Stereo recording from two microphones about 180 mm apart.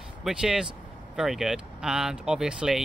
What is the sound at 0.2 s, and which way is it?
Speech, 5° right (ahead or behind).